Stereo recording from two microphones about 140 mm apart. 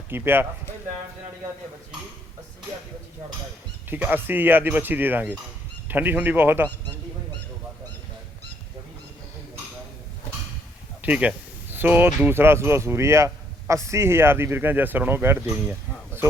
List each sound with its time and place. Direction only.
0.1 s speech: 15° right (ahead or behind)
3.8 s speech: 15° right (ahead or behind)
11.0 s speech: 10° right (ahead or behind)